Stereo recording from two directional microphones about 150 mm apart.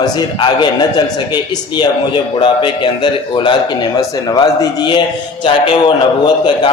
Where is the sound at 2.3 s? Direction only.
30° left (ahead or behind).